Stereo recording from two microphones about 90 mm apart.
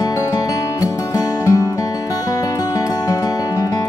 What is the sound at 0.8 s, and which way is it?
Music, 40° left (ahead or behind).